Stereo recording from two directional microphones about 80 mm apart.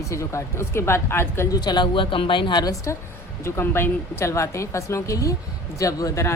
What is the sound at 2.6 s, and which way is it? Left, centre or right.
Speech, left.